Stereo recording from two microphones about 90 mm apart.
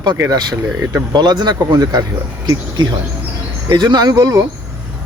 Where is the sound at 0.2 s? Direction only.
45° right (ahead or behind).